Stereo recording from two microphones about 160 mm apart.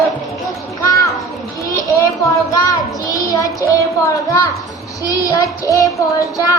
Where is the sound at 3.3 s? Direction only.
20° left (ahead or behind).